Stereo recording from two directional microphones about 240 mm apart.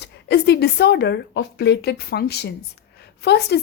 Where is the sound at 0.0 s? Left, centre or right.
Left.